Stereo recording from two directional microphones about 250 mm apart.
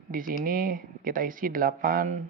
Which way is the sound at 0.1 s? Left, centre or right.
Right.